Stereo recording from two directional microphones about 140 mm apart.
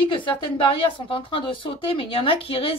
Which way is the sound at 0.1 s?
35° left (ahead or behind).